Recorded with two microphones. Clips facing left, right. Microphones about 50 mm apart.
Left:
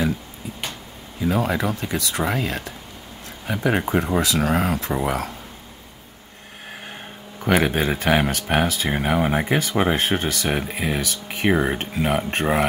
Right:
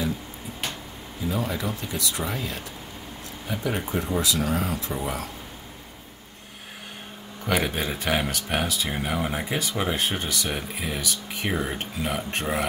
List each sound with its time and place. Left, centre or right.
1.2 s speech: left
7.4 s speech: left